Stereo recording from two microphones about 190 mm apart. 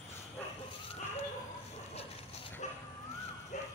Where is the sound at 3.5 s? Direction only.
40° left (ahead or behind).